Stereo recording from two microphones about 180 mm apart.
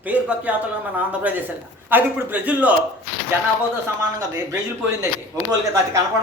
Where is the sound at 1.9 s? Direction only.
10° right (ahead or behind).